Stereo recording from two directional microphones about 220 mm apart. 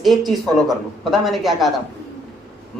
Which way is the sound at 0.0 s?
Centre (ahead or behind).